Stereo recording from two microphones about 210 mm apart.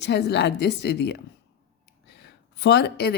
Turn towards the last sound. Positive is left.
turn(degrees=50)  # may be behind; listen again after turning